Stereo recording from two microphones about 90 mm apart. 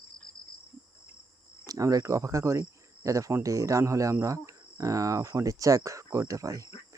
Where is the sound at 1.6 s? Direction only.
40° right (ahead or behind).